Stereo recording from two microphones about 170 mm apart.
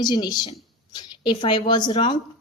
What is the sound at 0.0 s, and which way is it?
A woman's voice, 25° left (ahead or behind).